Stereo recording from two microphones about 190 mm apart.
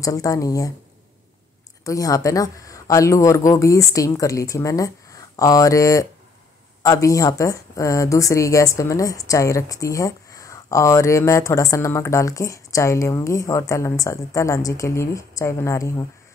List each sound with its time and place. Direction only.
0.0 s speech: 15° left (ahead or behind)
1.9 s speech: 15° left (ahead or behind)